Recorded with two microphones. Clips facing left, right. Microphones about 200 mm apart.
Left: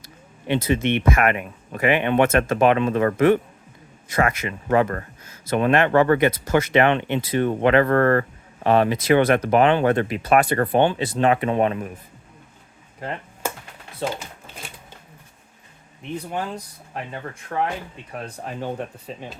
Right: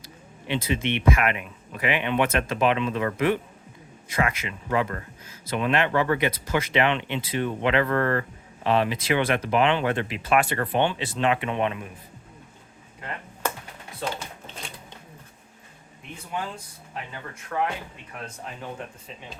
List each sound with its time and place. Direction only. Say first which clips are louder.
0.4 s speech: left 5 dB; 45° left (ahead or behind)
14.0 s a sound: left 4 dB; 5° left (ahead or behind)
16.1 s speech: left 5 dB; 40° left (ahead or behind)